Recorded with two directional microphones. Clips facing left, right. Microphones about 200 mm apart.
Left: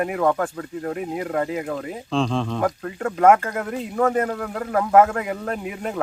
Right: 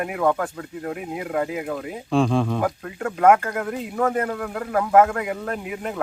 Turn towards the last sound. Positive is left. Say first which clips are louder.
# left 1 dB
turn(degrees=0)  # may be behind; listen again after turning